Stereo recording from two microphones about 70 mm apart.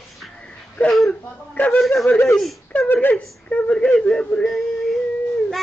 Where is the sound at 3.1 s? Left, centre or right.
Centre.